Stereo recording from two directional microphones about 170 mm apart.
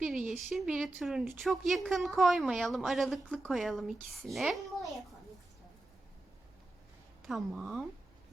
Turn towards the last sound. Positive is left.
turn(degrees=-5)  # may be behind; listen again after turning